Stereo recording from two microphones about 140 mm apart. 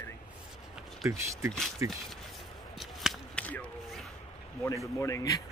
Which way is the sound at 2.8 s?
Centre (ahead or behind).